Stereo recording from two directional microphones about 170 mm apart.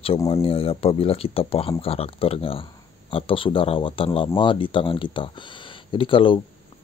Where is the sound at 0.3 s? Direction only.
35° left (ahead or behind).